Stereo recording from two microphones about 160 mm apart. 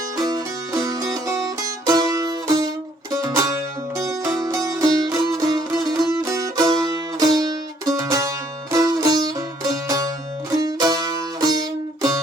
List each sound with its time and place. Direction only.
0.2 s music: 25° right (ahead or behind)